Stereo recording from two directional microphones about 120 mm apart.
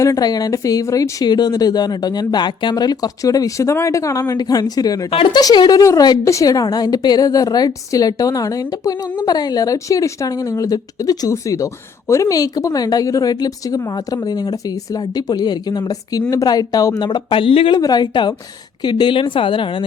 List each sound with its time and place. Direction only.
0.0 s a woman's voice: 30° left (ahead or behind)
5.1 s a woman's voice: 45° left (ahead or behind)
5.4 s a woman's voice: 35° left (ahead or behind); by 17.7 s 50° left (ahead or behind)
17.7 s a woman's voice: 35° left (ahead or behind)